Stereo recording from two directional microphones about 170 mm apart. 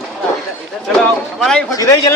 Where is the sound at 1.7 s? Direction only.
20° left (ahead or behind).